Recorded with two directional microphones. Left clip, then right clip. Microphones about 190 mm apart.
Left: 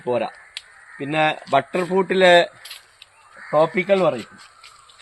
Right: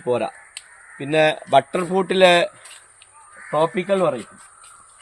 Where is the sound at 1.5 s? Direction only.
65° right (ahead or behind).